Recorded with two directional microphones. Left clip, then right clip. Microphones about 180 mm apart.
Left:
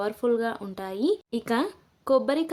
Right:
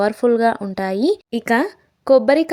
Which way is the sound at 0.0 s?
35° right (ahead or behind).